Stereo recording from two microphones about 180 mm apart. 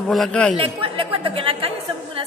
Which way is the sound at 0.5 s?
30° right (ahead or behind).